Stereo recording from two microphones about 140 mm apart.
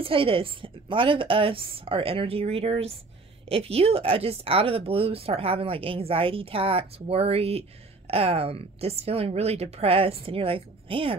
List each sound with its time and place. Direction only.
0.0 s speech: 40° right (ahead or behind)